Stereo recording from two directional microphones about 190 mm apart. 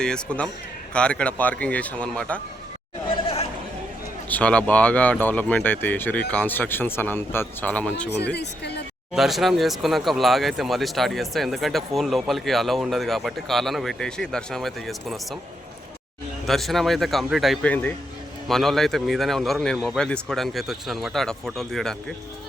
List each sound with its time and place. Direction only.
0.0 s speech: 5° left (ahead or behind)
4.3 s speech: 5° left (ahead or behind)
8.4 s speech: 60° left (ahead or behind)
9.1 s speech: centre (ahead or behind)
16.5 s speech: centre (ahead or behind)